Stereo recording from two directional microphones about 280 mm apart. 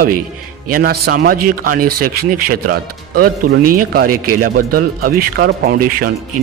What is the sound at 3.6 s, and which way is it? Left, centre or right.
Speech, right.